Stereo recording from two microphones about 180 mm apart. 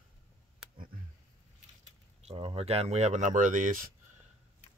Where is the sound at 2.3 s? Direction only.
30° right (ahead or behind).